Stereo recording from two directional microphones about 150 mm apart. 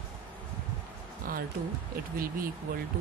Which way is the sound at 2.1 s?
70° right (ahead or behind).